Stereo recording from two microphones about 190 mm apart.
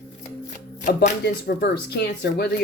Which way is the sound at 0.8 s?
55° left (ahead or behind).